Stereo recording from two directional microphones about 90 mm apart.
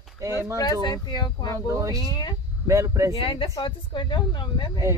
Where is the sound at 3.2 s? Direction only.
75° left (ahead or behind).